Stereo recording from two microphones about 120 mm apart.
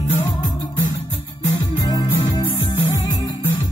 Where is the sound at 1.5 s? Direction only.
30° left (ahead or behind).